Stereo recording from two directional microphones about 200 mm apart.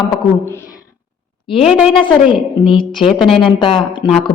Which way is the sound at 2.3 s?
25° left (ahead or behind).